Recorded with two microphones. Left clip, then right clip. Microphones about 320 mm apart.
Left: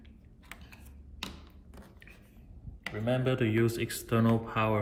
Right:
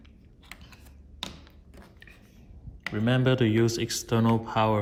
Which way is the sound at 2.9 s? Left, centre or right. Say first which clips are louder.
Right 4 dB; right.